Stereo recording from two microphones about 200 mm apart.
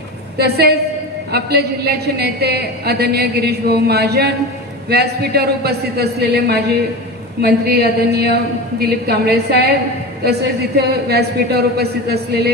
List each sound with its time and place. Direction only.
0.4 s a woman's voice: 55° right (ahead or behind)